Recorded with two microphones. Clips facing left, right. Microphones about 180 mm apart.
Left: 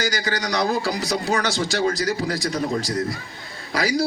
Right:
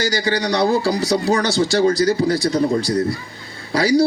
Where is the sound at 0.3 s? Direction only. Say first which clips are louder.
Right 6 dB; 35° right (ahead or behind).